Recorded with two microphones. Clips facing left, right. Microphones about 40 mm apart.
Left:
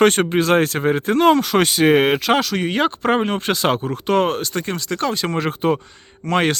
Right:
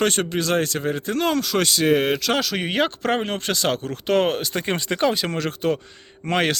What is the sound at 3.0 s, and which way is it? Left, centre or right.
Speech, centre.